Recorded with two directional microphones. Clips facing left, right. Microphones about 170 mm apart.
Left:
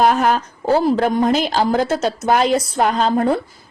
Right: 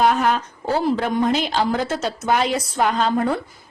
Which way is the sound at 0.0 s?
45° left (ahead or behind).